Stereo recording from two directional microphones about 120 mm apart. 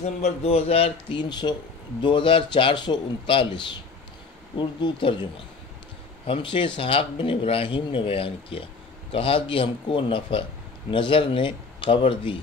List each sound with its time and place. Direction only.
0.0 s a man's voice: 60° left (ahead or behind)
1.0 s a man's voice: 40° left (ahead or behind)
6.2 s speech: 45° left (ahead or behind)